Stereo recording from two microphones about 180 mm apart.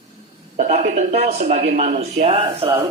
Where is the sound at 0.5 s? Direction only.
40° right (ahead or behind).